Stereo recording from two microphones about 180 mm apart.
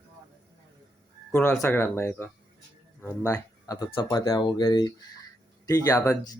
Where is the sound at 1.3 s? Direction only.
10° left (ahead or behind).